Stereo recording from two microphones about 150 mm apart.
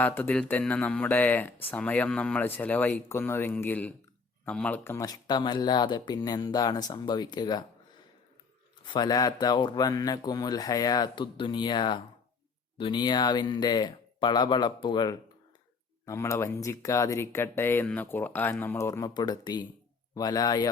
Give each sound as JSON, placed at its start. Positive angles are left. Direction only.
{"t": 0.0, "sound": "speech", "side_deg": 15}
{"t": 8.8, "sound": "speech", "side_deg": 30}